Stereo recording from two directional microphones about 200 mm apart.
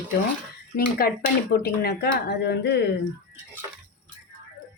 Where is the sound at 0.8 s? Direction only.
50° left (ahead or behind).